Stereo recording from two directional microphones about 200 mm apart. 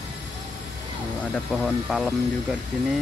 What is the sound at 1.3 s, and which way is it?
Speech, centre (ahead or behind).